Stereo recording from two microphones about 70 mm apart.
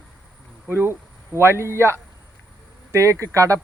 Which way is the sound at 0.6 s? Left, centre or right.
Right.